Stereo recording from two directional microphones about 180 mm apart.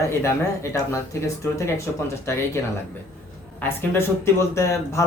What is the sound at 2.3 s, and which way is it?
Speech, 15° left (ahead or behind).